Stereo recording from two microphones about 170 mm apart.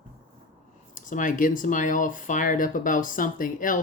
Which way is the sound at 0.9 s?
50° left (ahead or behind).